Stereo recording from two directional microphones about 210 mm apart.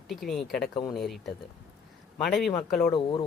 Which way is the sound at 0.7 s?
20° left (ahead or behind).